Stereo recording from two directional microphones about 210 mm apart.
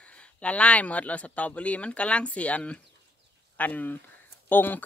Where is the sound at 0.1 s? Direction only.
5° left (ahead or behind).